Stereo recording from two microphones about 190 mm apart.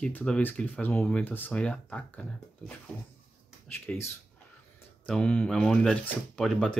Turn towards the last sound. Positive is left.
turn(degrees=5)  # may be behind; listen again after turning